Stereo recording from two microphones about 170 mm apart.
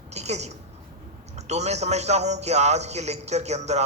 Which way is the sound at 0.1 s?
40° right (ahead or behind).